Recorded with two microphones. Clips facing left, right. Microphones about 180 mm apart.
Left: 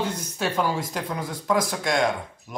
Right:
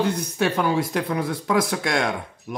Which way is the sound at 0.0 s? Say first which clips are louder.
Right 5 dB; 65° right (ahead or behind).